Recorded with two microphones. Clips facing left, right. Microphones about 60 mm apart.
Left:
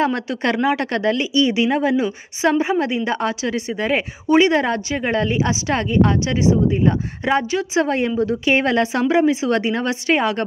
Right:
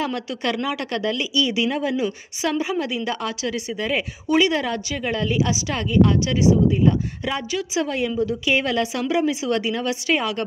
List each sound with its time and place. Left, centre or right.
0.0 s speech: left